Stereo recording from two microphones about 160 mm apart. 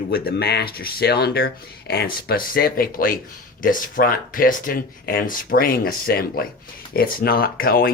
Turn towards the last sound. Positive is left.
turn(degrees=65)  # may be behind; listen again after turning